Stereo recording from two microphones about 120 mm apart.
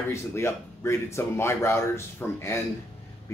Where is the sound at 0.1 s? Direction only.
20° left (ahead or behind).